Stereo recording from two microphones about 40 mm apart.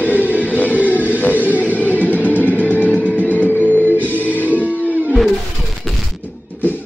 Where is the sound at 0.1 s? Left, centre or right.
Right.